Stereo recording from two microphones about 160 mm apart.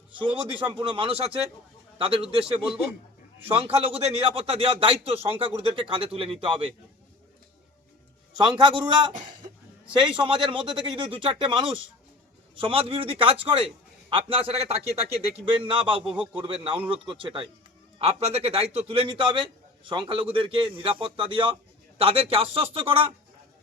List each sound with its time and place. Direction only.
0.2 s a man's voice: 30° right (ahead or behind)
3.5 s a man's voice: 35° right (ahead or behind)
8.4 s a man's voice: 30° right (ahead or behind)